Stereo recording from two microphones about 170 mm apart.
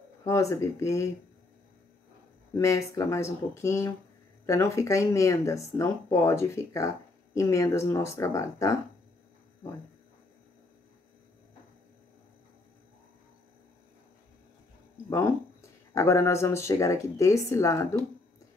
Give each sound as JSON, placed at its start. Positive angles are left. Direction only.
{"t": 0.2, "sound": "speech", "side_deg": 20}
{"t": 2.5, "sound": "speech", "side_deg": 20}
{"t": 15.0, "sound": "speech", "side_deg": 20}